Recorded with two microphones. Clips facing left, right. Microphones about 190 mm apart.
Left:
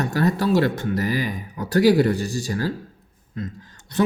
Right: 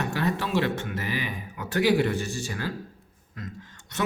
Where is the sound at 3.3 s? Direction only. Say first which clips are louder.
Left 7 dB; 30° left (ahead or behind).